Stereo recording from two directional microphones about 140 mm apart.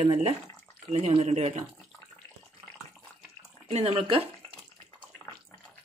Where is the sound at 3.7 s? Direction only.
50° right (ahead or behind).